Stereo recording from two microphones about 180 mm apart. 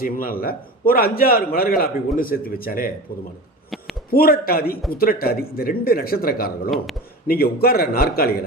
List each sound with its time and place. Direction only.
0.0 s a man's voice: 55° left (ahead or behind)
4.1 s a man's voice: 55° left (ahead or behind)